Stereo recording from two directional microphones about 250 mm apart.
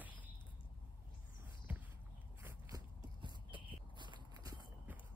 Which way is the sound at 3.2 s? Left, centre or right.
Centre.